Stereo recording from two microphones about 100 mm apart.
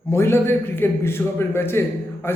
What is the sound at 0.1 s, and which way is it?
A man's voice, 25° left (ahead or behind).